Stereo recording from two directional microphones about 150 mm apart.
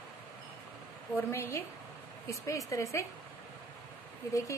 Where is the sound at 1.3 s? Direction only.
20° left (ahead or behind).